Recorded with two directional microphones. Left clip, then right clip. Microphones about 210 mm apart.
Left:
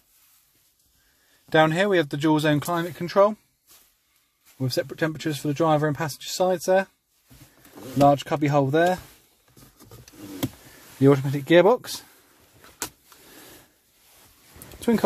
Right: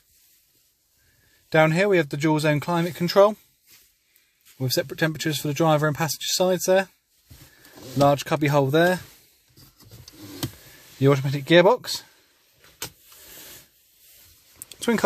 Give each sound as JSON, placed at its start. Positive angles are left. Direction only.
{"t": 1.5, "sound": "speech", "side_deg": -5}
{"t": 2.9, "sound": "speech", "side_deg": -25}
{"t": 4.6, "sound": "speech", "side_deg": -5}
{"t": 8.0, "sound": "speech", "side_deg": -10}
{"t": 11.0, "sound": "speech", "side_deg": 5}
{"t": 14.8, "sound": "speech", "side_deg": 0}